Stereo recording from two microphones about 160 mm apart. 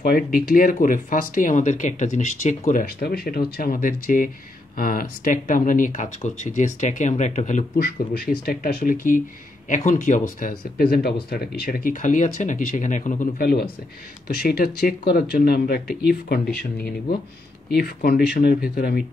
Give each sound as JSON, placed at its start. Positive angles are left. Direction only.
{"t": 0.0, "sound": "speech", "side_deg": 70}
{"t": 2.8, "sound": "speech", "side_deg": 70}
{"t": 7.7, "sound": "speech", "side_deg": 70}
{"t": 13.4, "sound": "speech", "side_deg": 70}
{"t": 17.6, "sound": "speech", "side_deg": 75}